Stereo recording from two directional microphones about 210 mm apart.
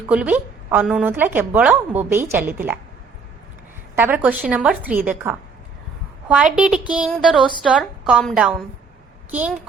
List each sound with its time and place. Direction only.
0.1 s a woman's voice: 5° right (ahead or behind)
3.9 s a woman's voice: 10° right (ahead or behind)